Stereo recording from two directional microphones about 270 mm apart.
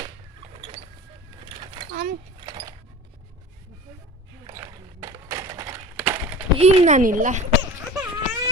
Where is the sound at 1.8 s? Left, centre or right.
Right.